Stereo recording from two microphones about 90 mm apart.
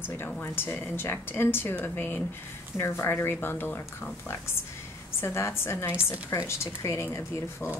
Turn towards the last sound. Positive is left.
turn(degrees=30)  # may be behind; listen again after turning